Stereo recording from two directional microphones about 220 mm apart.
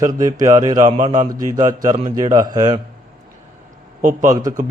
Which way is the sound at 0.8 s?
30° right (ahead or behind).